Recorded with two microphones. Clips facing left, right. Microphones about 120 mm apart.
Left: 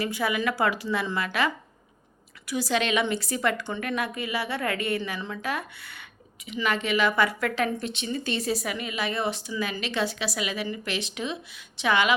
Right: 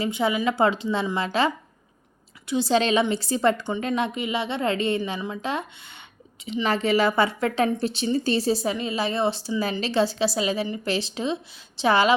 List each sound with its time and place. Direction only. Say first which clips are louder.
0.0 s a woman's voice: right 3 dB; 25° right (ahead or behind)